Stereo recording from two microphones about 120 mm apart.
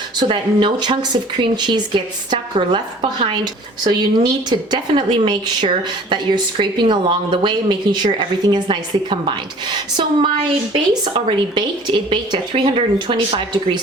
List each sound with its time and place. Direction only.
0.2 s speech: 40° right (ahead or behind)
12.7 s speech: 50° right (ahead or behind)